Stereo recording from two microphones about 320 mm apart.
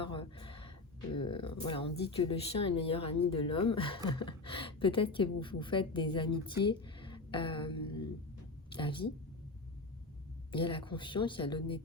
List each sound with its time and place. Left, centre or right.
0.0 s a sound: centre
1.1 s a woman's voice: centre
10.5 s speech: centre